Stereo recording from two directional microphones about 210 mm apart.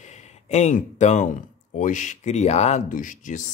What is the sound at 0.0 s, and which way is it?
Speech, 30° left (ahead or behind).